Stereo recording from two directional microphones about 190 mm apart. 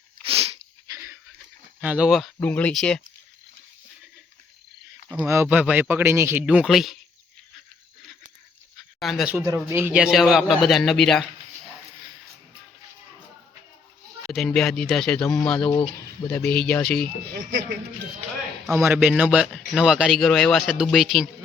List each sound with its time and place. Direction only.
0.9 s dog: 15° right (ahead or behind)
1.8 s speech: 5° right (ahead or behind)
5.0 s speech: 15° right (ahead or behind)
8.8 s a sound: centre (ahead or behind)
9.6 s speech: 15° right (ahead or behind); by 11.3 s 5° left (ahead or behind)
14.3 s speech: centre (ahead or behind)
15.7 s speech: 25° left (ahead or behind)
16.3 s speech: 5° left (ahead or behind)
17.2 s speech: 45° right (ahead or behind)
18.8 s speech: 5° right (ahead or behind)